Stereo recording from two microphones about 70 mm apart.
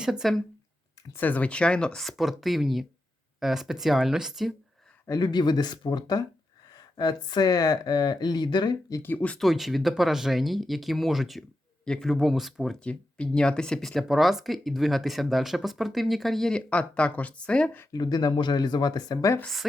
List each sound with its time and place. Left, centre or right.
0.0 s speech: centre
1.1 s speech: left; by 4.5 s centre
5.2 s speech: left
9.0 s speech: left
9.4 s speech: centre
12.8 s speech: centre
17.9 s speech: left